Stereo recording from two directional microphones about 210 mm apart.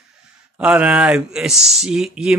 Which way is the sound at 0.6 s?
5° right (ahead or behind).